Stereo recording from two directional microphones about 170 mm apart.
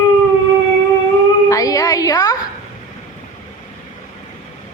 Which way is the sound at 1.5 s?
20° left (ahead or behind).